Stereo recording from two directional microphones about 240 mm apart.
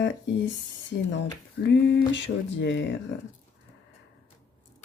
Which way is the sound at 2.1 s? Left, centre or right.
Left.